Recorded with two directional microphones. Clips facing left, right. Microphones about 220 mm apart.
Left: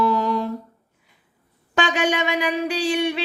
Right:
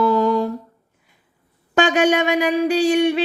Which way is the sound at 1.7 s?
50° right (ahead or behind).